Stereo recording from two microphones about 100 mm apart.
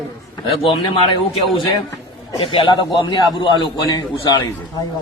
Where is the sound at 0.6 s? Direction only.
60° left (ahead or behind).